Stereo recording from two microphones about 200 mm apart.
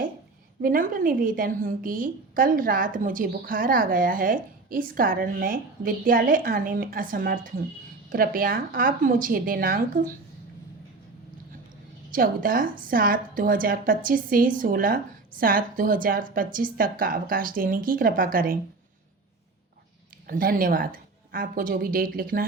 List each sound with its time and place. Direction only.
0.6 s a woman's voice: 45° right (ahead or behind)
12.1 s a woman's voice: 45° right (ahead or behind)
20.2 s a woman's voice: 45° right (ahead or behind)